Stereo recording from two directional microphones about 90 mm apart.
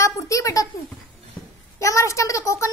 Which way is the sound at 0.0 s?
35° left (ahead or behind).